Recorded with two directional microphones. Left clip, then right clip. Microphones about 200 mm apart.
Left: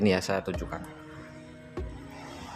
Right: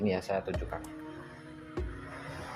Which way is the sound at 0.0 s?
25° left (ahead or behind).